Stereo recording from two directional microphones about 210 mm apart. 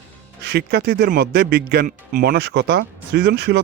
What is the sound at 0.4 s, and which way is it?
A man's voice, 50° right (ahead or behind).